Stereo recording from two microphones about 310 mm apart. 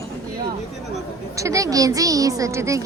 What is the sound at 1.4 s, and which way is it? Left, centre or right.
A woman's voice, centre.